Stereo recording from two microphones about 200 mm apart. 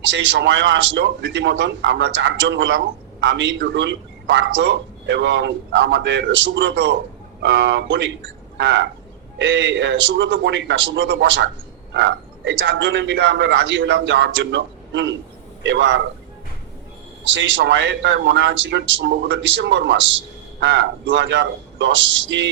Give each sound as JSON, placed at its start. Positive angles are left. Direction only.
{"t": 0.0, "sound": "speech", "side_deg": -65}
{"t": 17.2, "sound": "speech", "side_deg": -70}